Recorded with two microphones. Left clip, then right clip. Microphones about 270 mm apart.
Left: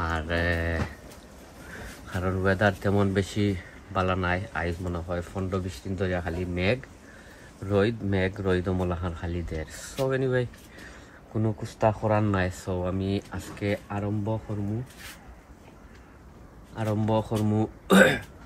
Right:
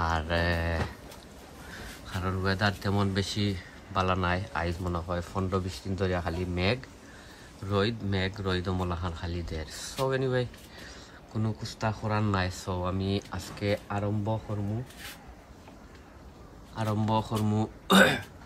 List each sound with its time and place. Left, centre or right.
0.2 s a sound: centre
2.1 s speech: centre; by 14.4 s right
16.7 s speech: centre